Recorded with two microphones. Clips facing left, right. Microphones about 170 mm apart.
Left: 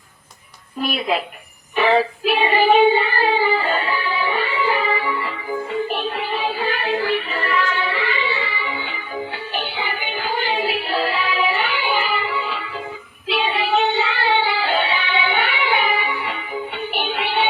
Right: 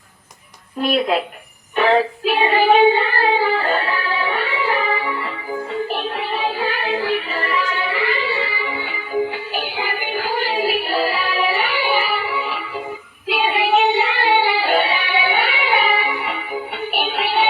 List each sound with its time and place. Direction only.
0.8 s female singing: 5° left (ahead or behind)
3.3 s music: centre (ahead or behind)
13.2 s child singing: 10° right (ahead or behind)